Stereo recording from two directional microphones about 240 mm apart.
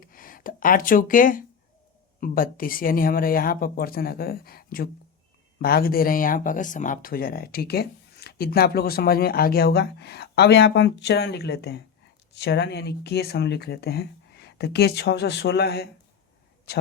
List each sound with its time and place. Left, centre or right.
0.0 s speech: left